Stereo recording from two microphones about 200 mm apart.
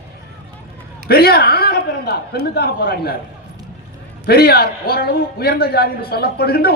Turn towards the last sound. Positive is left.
turn(degrees=50)  # may be behind; listen again after turning